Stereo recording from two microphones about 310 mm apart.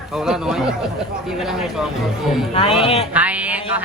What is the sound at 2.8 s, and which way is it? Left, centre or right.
Speech, centre.